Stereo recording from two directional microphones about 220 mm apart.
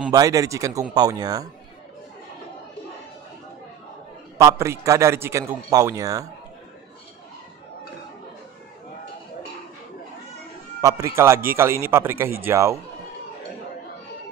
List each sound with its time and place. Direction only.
0.1 s a man's voice: 15° right (ahead or behind)
4.4 s a man's voice: 15° right (ahead or behind)
10.8 s a man's voice: 15° right (ahead or behind)